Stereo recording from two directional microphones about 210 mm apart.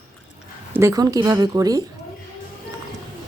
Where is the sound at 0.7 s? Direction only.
15° right (ahead or behind).